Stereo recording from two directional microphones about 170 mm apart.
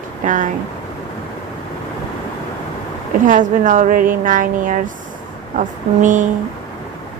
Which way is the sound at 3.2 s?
50° right (ahead or behind).